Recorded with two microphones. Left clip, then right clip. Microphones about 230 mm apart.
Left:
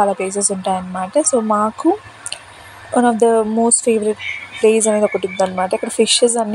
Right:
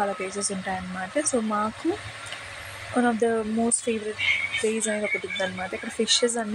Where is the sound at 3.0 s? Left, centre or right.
Centre.